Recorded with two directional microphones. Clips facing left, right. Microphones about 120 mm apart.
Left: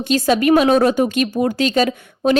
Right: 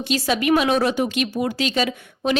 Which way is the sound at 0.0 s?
45° left (ahead or behind).